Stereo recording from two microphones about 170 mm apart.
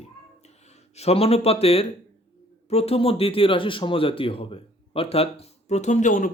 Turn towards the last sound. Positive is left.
turn(degrees=50)  # may be behind; listen again after turning